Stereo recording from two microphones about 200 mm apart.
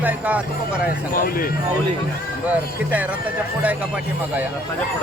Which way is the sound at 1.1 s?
45° left (ahead or behind).